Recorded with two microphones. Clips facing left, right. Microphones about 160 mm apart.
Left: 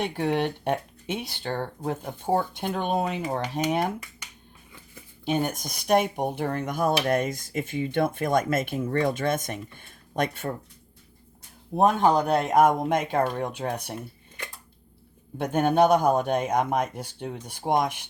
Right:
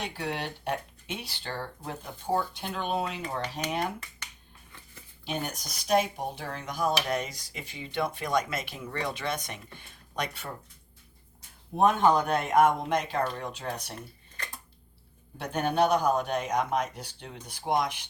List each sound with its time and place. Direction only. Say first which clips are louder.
0.0 s speech: left 8 dB; 55° left (ahead or behind)
5.2 s speech: left 8 dB; 50° left (ahead or behind)
11.8 s speech: left 2 dB; 35° left (ahead or behind); by 13.9 s 55° left (ahead or behind)
15.4 s speech: left 5 dB; 50° left (ahead or behind)